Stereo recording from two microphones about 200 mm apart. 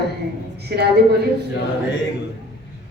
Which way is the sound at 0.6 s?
55° right (ahead or behind).